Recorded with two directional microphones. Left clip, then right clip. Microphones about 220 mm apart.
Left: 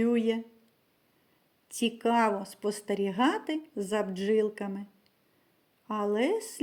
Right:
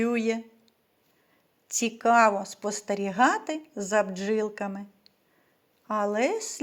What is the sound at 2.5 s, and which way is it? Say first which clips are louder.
Speech: right 2 dB; 10° right (ahead or behind).